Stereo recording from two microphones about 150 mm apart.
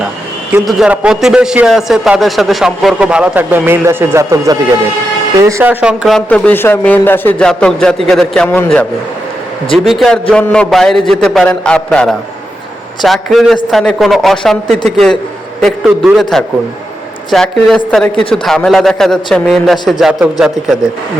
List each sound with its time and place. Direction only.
0.6 s speech: centre (ahead or behind); by 5.7 s 20° right (ahead or behind)
5.8 s speech: 5° right (ahead or behind)
6.1 s a man's voice: 10° left (ahead or behind)
16.3 s a man's voice: centre (ahead or behind)